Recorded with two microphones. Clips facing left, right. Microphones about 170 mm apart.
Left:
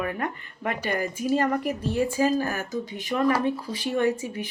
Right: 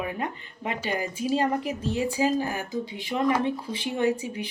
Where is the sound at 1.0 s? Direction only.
45° left (ahead or behind).